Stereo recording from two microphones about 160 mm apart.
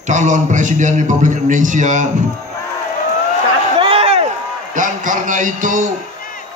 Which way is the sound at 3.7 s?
35° right (ahead or behind).